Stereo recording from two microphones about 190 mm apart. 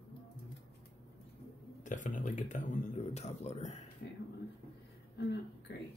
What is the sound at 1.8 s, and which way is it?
Speech, 40° left (ahead or behind).